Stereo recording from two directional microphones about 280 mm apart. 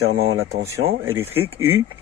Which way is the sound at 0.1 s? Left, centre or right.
Right.